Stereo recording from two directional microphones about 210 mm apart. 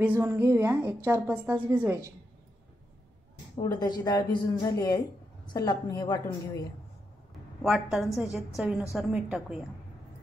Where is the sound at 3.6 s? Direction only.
20° left (ahead or behind).